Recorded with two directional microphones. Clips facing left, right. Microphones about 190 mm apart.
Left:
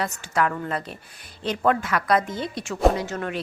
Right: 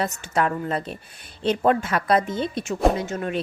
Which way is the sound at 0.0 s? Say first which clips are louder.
Right 1 dB; 25° right (ahead or behind).